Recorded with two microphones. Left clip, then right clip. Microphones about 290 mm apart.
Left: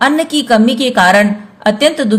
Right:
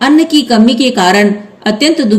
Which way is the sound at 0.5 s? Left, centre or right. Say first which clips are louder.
Right 1 dB; left.